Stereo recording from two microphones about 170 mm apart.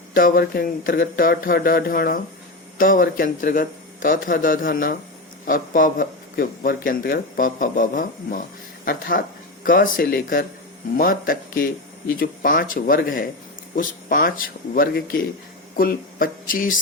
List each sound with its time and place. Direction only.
0.1 s speech: 55° left (ahead or behind)